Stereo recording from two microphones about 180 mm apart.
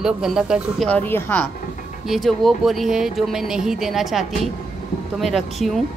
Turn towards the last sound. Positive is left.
turn(degrees=0)  # may be behind; listen again after turning